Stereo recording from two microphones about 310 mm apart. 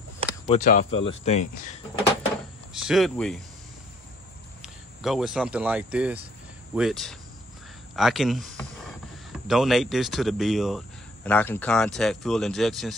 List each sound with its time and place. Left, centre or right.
0.5 s speech: left
2.7 s speech: centre
4.6 s speech: centre